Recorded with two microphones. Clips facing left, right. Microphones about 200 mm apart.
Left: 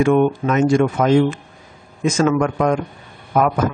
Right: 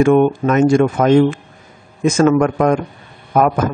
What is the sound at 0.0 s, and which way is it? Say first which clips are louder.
Speech: right 3 dB; 45° right (ahead or behind).